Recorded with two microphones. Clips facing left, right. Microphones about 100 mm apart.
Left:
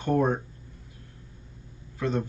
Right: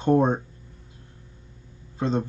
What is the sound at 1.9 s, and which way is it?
Speech, 25° right (ahead or behind).